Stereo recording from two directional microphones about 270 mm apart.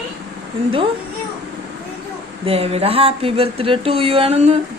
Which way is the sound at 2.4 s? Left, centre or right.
Right.